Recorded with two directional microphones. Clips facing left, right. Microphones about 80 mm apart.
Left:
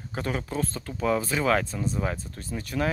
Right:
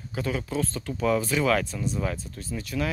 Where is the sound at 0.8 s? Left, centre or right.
Left.